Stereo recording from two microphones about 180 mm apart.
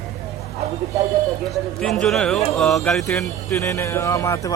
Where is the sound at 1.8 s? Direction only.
Centre (ahead or behind).